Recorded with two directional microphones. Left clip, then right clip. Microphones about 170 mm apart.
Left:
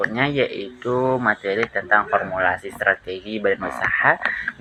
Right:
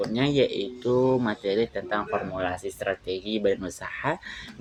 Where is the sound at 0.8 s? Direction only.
15° right (ahead or behind).